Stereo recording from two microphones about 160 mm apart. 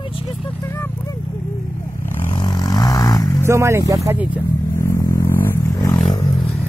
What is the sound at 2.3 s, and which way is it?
Vehicle, 25° left (ahead or behind).